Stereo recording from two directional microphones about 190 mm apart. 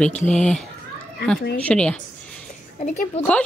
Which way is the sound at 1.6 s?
5° left (ahead or behind).